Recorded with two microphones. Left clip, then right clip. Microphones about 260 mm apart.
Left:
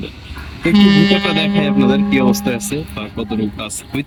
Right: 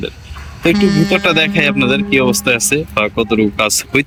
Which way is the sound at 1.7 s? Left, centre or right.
Centre.